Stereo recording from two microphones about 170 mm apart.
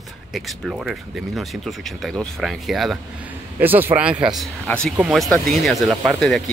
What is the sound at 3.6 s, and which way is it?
Speech, 10° right (ahead or behind).